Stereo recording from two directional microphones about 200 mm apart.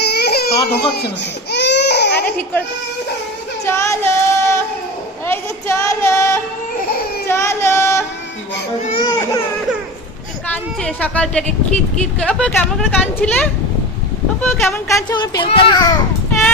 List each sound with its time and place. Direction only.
0.0 s baby cry: 55° left (ahead or behind)
3.7 s female singing: 15° left (ahead or behind)
5.2 s child singing: 10° left (ahead or behind)
7.3 s a sound: 15° left (ahead or behind)
9.0 s baby cry: 20° left (ahead or behind)
10.5 s a child's voice: 5° left (ahead or behind); by 16.0 s 25° left (ahead or behind)